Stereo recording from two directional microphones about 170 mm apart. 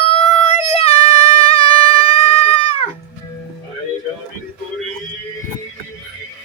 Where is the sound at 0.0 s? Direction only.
35° left (ahead or behind).